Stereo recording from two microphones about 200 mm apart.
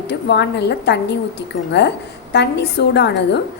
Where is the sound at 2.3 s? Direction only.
55° left (ahead or behind).